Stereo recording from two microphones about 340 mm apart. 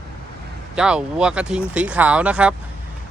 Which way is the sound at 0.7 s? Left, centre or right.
Centre.